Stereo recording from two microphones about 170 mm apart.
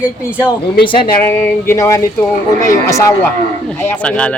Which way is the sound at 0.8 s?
30° left (ahead or behind).